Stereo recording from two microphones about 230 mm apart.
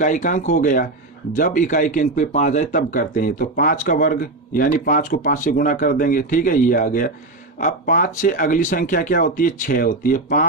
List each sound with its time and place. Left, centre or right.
0.0 s speech: left